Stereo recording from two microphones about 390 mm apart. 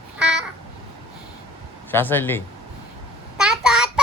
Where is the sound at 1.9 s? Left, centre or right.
Centre.